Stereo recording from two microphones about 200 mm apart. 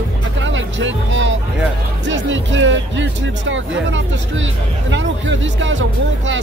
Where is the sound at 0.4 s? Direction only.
70° right (ahead or behind).